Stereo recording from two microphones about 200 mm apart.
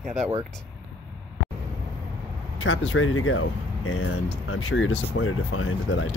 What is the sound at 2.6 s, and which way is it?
Speech, 80° left.